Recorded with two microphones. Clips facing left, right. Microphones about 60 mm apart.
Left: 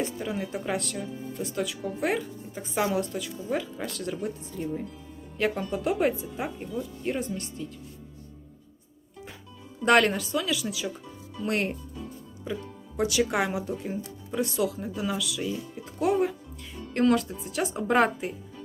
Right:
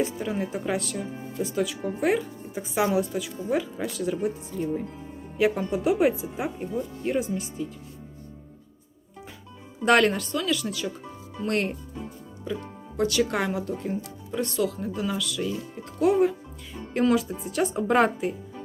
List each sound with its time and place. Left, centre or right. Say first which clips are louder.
0.0 s speech: right 3 dB; centre
9.8 s speech: right 1 dB; centre
13.0 s speech: right 1 dB; centre